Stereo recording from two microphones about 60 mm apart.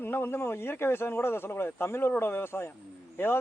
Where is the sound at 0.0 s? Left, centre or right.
Left.